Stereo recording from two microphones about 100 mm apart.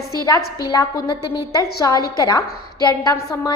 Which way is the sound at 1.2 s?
50° left (ahead or behind).